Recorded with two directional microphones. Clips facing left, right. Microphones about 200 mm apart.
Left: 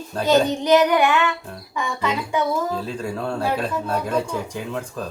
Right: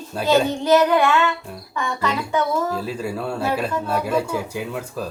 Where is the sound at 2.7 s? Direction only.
5° right (ahead or behind).